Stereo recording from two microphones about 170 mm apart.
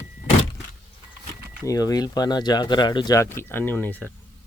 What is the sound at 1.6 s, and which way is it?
Speech, 20° left (ahead or behind).